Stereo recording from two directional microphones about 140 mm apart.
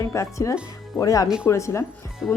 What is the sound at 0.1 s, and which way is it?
Speech, 20° left (ahead or behind).